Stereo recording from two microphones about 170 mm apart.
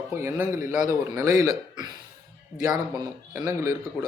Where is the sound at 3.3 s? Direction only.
15° right (ahead or behind).